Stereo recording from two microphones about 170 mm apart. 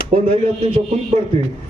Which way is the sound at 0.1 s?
35° right (ahead or behind).